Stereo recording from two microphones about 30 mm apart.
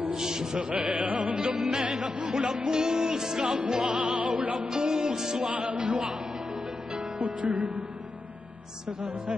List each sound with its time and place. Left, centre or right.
0.1 s music: right
0.6 s music: right
2.7 s music: right
3.2 s music: centre
3.4 s music: right
4.6 s music: right
5.4 s music: right
7.2 s music: right